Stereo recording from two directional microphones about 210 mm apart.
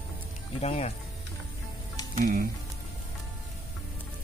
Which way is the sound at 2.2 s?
45° right (ahead or behind).